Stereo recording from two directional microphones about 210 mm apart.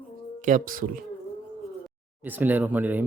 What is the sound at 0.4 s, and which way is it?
Speech, 40° right (ahead or behind).